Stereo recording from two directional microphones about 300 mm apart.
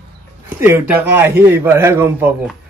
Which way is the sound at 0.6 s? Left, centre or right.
Centre.